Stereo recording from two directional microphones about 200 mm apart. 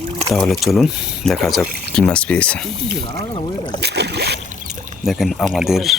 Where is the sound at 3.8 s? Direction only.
55° right (ahead or behind).